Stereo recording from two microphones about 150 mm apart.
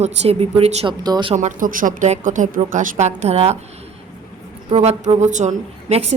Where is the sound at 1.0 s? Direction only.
25° right (ahead or behind).